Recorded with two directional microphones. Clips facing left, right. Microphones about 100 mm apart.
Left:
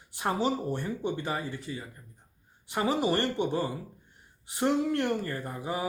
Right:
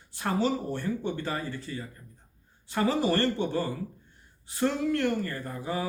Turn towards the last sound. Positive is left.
turn(degrees=20)  # may be behind; listen again after turning